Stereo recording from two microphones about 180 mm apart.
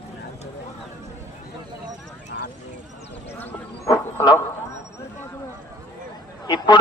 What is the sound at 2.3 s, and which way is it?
Clip-clop, 75° left (ahead or behind).